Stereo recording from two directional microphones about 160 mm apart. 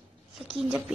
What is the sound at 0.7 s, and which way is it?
Speech, 10° right (ahead or behind).